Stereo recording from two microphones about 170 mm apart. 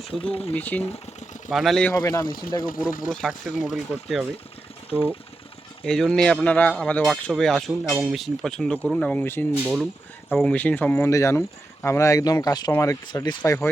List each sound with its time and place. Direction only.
0.1 s speech: 35° left (ahead or behind)
0.5 s speech: 10° left (ahead or behind)
1.9 s speech: 20° left (ahead or behind)
3.1 s speech: centre (ahead or behind)